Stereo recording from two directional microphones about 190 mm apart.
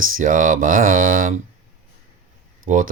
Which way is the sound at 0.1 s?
45° right (ahead or behind).